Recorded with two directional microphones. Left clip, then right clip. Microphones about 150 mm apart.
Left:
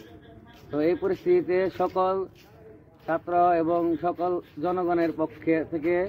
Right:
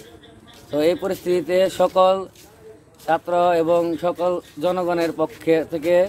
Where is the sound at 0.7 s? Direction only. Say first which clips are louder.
Right 5 dB; 40° right (ahead or behind).